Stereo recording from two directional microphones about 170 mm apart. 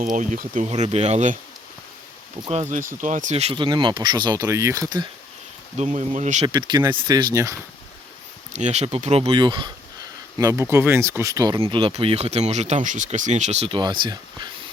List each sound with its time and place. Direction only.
0.0 s speech: 50° right (ahead or behind)
2.5 s speech: 40° right (ahead or behind); by 5.0 s 20° right (ahead or behind)
5.7 s speech: 40° right (ahead or behind)
6.5 s speech: 25° right (ahead or behind)
8.5 s speech: 40° right (ahead or behind); by 11.6 s 20° right (ahead or behind)
11.6 s speech: 30° right (ahead or behind)